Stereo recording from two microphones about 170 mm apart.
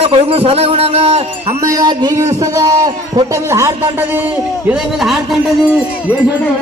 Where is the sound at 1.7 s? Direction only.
20° right (ahead or behind).